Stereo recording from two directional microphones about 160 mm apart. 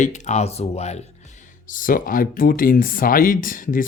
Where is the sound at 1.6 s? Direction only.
55° left (ahead or behind).